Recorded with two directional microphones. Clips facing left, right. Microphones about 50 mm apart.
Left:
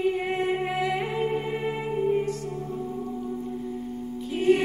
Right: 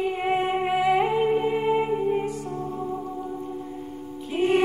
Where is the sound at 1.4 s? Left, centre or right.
Centre.